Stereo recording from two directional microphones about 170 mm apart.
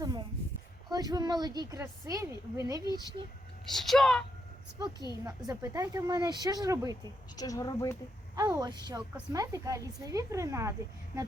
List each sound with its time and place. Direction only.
0.0 s a sound: 25° right (ahead or behind)
0.9 s a woman's voice: 25° right (ahead or behind)
3.7 s speech: centre (ahead or behind)
4.8 s a woman's voice: 20° right (ahead or behind)
7.3 s a woman's voice: 20° left (ahead or behind)
8.4 s a woman's voice: 20° right (ahead or behind)